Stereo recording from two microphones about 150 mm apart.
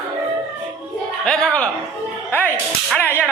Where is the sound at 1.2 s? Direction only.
5° left (ahead or behind).